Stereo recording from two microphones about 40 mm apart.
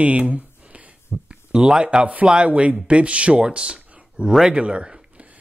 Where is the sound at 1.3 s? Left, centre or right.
Right.